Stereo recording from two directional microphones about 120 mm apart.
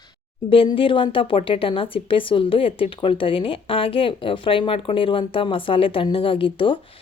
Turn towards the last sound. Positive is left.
turn(degrees=45)  # may be behind; listen again after turning